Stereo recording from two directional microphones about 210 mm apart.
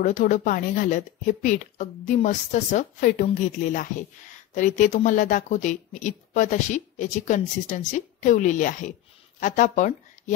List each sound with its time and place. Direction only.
0.0 s speech: 35° left (ahead or behind)